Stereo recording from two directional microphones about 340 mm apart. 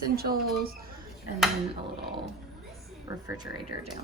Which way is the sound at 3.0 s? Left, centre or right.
Centre.